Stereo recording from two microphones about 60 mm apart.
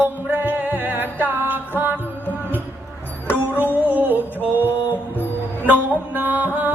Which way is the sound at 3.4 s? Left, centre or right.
Right.